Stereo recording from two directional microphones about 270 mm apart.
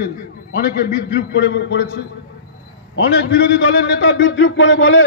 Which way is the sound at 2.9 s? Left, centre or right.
Left.